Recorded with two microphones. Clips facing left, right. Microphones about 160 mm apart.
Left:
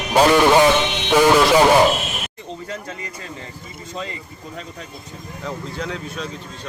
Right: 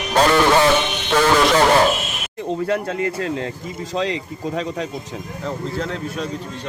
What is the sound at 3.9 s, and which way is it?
Speech, 90° right.